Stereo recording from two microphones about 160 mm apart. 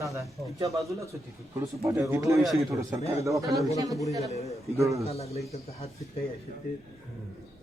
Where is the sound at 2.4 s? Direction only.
Centre (ahead or behind).